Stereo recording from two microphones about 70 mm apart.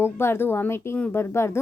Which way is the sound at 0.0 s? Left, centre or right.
Left.